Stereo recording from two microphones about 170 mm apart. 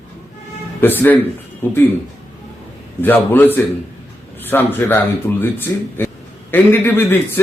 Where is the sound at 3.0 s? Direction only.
10° left (ahead or behind).